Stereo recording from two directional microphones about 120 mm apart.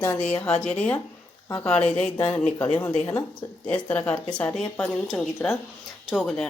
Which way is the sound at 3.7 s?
10° left (ahead or behind).